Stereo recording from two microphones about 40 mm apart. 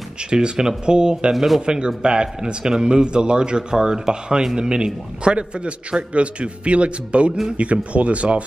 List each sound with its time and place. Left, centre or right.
0.3 s a man's voice: centre
1.3 s speech: centre
2.0 s a man's voice: right